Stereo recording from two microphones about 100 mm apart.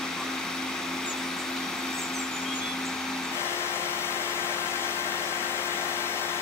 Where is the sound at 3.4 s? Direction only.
25° left (ahead or behind).